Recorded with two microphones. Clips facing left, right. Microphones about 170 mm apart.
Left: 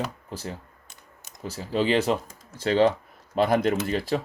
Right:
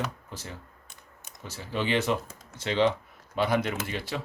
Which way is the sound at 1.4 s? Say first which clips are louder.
Left 6 dB; 35° left (ahead or behind).